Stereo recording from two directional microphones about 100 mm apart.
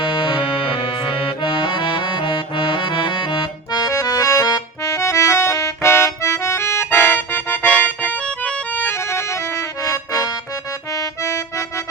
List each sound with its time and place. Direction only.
0.0 s accordion: 60° left (ahead or behind); by 9.2 s 20° left (ahead or behind)
9.8 s accordion: 35° left (ahead or behind)